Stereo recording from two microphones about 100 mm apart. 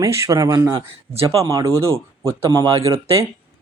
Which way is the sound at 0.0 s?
30° right (ahead or behind).